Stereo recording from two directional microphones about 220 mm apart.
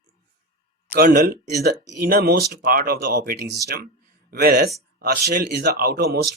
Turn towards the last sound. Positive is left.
turn(degrees=-45)  # may be behind; listen again after turning